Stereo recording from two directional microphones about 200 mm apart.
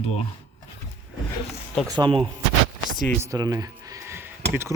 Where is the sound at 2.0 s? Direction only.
25° right (ahead or behind).